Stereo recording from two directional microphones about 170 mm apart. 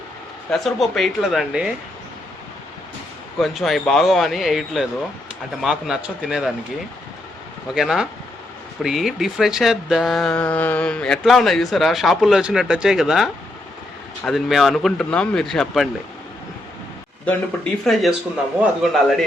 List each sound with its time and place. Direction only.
0.5 s speech: centre (ahead or behind)
3.3 s speech: centre (ahead or behind)
7.7 s speech: centre (ahead or behind)
17.2 s speech: 5° left (ahead or behind)